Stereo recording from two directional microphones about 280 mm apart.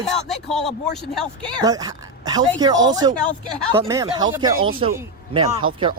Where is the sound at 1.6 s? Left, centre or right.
Centre.